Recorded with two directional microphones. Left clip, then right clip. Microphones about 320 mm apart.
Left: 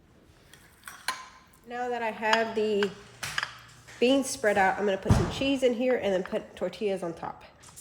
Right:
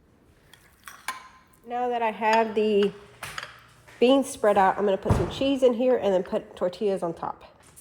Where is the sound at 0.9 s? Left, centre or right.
Centre.